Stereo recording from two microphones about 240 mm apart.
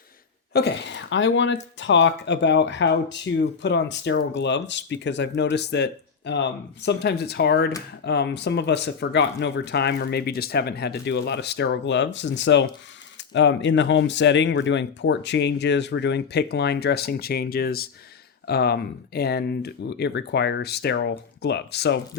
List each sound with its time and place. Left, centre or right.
0.5 s speech: left